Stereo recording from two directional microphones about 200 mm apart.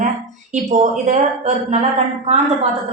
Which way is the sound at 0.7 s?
35° right (ahead or behind).